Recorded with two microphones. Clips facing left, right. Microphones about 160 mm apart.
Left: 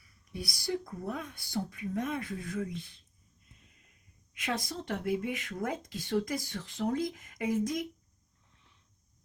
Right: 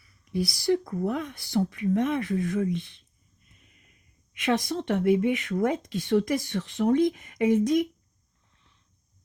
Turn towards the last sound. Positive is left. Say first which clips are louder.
# right 9 dB
turn(degrees=-75)  # may be behind; listen again after turning